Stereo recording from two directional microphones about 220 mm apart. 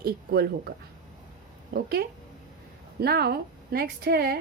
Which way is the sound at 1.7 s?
45° right (ahead or behind).